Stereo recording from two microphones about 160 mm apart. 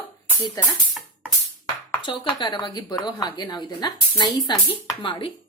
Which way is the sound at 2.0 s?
25° left (ahead or behind).